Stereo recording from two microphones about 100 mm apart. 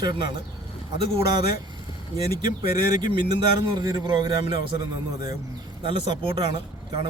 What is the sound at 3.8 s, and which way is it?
Speech, 45° right (ahead or behind).